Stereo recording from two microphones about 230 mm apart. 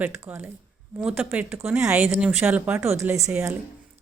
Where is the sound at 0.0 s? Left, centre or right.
Centre.